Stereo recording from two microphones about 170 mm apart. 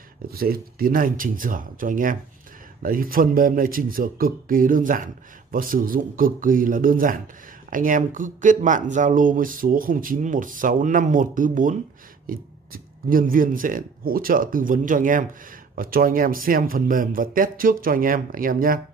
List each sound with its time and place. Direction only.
0.3 s speech: 60° right (ahead or behind)